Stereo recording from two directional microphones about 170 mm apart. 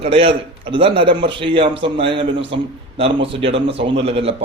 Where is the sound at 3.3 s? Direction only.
35° right (ahead or behind).